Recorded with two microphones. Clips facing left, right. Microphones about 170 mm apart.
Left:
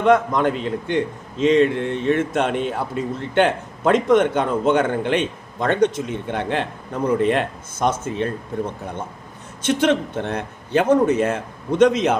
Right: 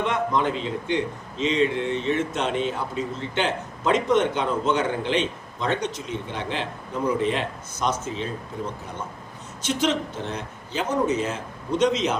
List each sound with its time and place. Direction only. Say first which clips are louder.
0.0 s a man's voice: left 7 dB; 50° left (ahead or behind)
9.6 s a man's voice: left 6 dB; 55° left (ahead or behind)